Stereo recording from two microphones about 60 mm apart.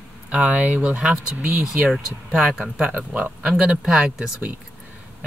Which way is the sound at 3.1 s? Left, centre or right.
Right.